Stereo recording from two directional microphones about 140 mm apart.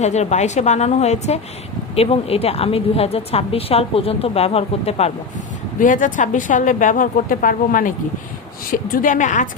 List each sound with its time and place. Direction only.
0.0 s a woman's voice: 55° left (ahead or behind)
5.8 s a woman's voice: 70° left (ahead or behind)